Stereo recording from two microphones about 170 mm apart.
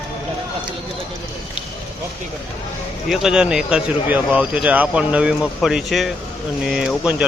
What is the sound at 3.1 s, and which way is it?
Speech, 5° right (ahead or behind).